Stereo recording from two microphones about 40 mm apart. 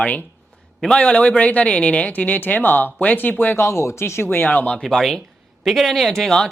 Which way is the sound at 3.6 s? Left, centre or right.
Left.